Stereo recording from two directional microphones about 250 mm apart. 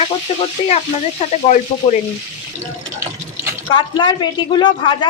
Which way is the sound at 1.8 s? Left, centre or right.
Centre.